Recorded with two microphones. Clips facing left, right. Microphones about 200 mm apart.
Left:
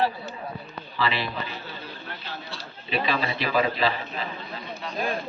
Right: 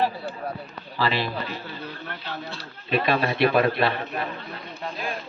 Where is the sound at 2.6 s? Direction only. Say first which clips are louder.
Right 3 dB; 55° right (ahead or behind).